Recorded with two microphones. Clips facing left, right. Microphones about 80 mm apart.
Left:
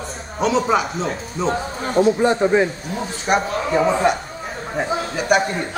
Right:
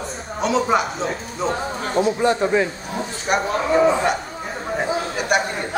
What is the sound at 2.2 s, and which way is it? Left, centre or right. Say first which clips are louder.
Speech: left 2 dB; centre.